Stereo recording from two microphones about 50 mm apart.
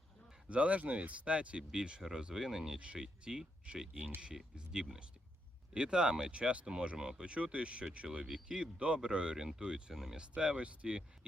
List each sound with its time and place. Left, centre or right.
0.4 s speech: right
9.9 s speech: centre
10.2 s speech: centre